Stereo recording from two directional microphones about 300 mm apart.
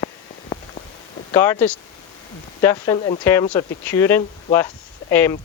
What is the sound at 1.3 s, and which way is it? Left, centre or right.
Speech, centre.